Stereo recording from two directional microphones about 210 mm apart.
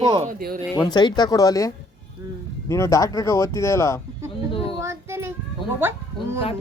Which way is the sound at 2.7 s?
15° left (ahead or behind).